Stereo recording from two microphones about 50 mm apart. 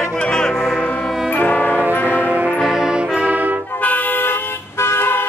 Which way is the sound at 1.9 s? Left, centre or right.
Left.